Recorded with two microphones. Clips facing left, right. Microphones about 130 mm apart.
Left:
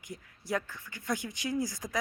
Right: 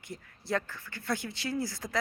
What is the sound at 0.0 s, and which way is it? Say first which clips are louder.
Speech: right 1 dB; 15° left (ahead or behind).